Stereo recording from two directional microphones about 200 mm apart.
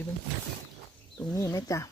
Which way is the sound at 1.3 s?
15° left (ahead or behind).